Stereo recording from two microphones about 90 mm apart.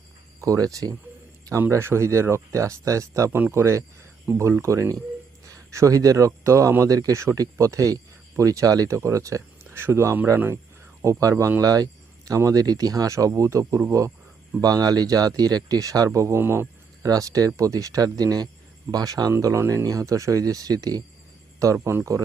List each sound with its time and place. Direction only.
0.4 s speech: 40° right (ahead or behind)
1.7 s speech: 30° right (ahead or behind)
11.0 s speech: 35° right (ahead or behind)
14.6 s speech: 45° right (ahead or behind); by 16.6 s 25° right (ahead or behind)
17.0 s speech: 40° right (ahead or behind)